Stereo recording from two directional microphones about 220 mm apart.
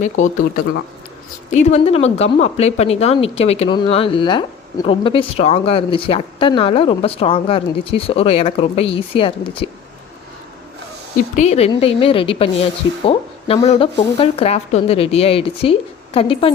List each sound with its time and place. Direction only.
0.0 s speech: 35° left (ahead or behind)
11.3 s speech: 30° left (ahead or behind)